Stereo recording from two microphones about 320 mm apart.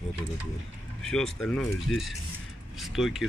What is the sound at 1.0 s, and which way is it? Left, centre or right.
Speech, centre.